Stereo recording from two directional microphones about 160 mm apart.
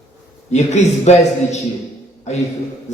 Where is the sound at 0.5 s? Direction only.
45° left (ahead or behind).